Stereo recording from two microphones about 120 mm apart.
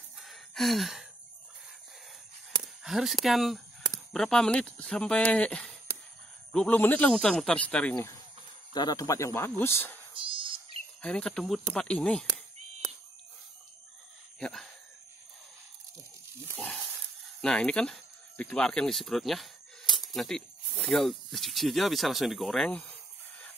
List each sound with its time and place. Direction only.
0.2 s a sound: centre (ahead or behind)
2.8 s speech: centre (ahead or behind)
8.7 s speech: 30° left (ahead or behind)
10.1 s owl: 45° right (ahead or behind)
11.0 s speech: 10° left (ahead or behind)
14.4 s speech: 5° left (ahead or behind)
16.5 s a sound: 10° left (ahead or behind)
17.4 s speech: 5° left (ahead or behind)